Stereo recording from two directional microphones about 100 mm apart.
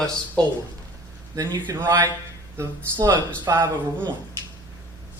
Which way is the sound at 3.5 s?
35° right (ahead or behind).